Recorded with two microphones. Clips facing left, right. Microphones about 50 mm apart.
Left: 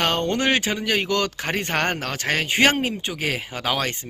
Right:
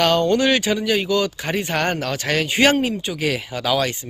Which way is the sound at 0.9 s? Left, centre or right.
Left.